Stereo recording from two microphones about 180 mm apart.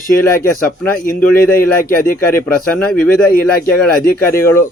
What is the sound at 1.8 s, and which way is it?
Speech, 50° left (ahead or behind).